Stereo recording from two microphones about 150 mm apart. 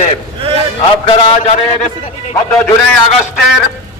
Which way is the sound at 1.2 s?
45° left (ahead or behind).